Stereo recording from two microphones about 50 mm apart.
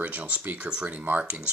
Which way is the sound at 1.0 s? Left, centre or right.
Right.